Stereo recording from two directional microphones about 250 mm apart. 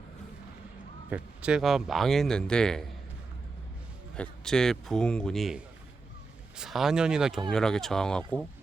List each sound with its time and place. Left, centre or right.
1.1 s speech: centre
4.1 s speech: centre